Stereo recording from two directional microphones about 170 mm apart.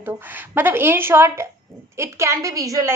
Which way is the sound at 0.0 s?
10° right (ahead or behind).